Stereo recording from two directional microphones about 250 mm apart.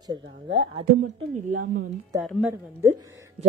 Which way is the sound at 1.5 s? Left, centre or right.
Right.